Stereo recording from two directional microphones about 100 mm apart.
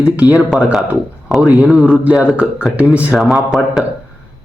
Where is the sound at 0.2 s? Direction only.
15° right (ahead or behind).